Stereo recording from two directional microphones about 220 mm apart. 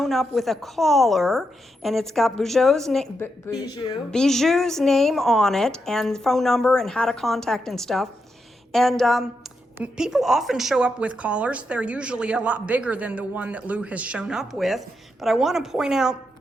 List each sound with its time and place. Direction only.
0.0 s speech: centre (ahead or behind)
3.6 s speech: 15° left (ahead or behind)
4.1 s speech: centre (ahead or behind)